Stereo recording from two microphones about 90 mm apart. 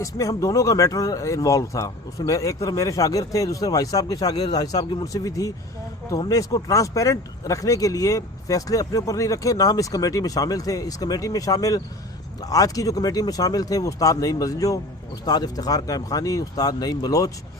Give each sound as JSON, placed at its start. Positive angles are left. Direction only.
{"t": 0.0, "sound": "speech", "side_deg": 40}